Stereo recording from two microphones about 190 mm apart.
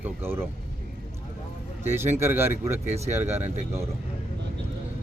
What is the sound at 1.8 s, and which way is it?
Speech, 10° right (ahead or behind).